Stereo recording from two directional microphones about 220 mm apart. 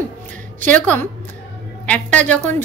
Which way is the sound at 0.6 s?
10° left (ahead or behind).